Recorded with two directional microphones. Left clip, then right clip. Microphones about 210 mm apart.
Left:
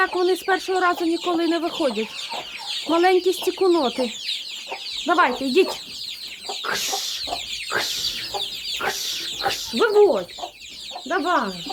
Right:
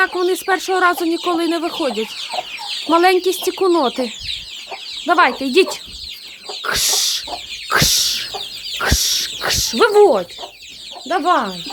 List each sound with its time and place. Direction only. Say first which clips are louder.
0.0 s speech: right 3 dB; 10° right (ahead or behind)
2.9 s speech: right 5 dB; 20° right (ahead or behind)
5.0 s speech: right 5 dB; 10° right (ahead or behind)
6.7 s chicken: right 8 dB; 10° right (ahead or behind)
8.8 s speech: right 10 dB; 15° right (ahead or behind)
11.1 s speech: right 5 dB; 15° right (ahead or behind)